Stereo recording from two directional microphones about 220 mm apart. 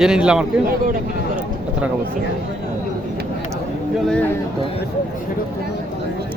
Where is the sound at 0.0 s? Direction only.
5° right (ahead or behind).